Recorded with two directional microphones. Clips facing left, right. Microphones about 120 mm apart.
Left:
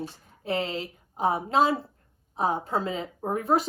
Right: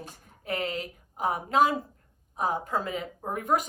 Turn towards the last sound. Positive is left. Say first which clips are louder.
# left 3 dB
turn(degrees=30)  # may be behind; listen again after turning